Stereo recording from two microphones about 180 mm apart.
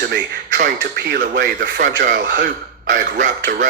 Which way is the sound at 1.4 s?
80° right.